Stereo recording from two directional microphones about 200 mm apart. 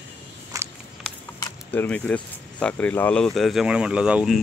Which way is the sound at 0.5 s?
15° right (ahead or behind).